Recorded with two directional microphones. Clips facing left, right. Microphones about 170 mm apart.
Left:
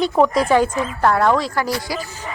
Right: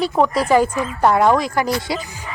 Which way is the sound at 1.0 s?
15° right (ahead or behind).